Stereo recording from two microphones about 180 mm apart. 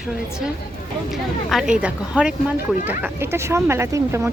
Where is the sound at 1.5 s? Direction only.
5° right (ahead or behind).